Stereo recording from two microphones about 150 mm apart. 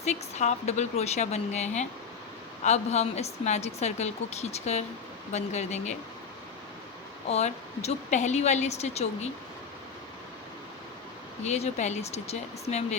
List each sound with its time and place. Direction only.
0.0 s a woman's voice: 50° left (ahead or behind)
7.3 s a woman's voice: 45° left (ahead or behind)
11.4 s a woman's voice: 50° left (ahead or behind)